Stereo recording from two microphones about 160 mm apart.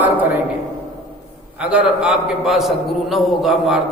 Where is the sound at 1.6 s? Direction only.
5° right (ahead or behind).